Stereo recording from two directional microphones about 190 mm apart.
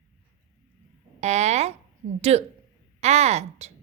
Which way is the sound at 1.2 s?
35° right (ahead or behind).